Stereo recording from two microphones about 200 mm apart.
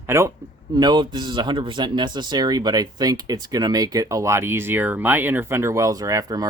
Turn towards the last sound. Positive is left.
turn(degrees=-15)  # may be behind; listen again after turning